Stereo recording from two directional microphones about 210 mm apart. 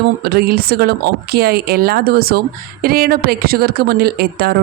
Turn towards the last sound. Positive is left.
turn(degrees=-45)  # may be behind; listen again after turning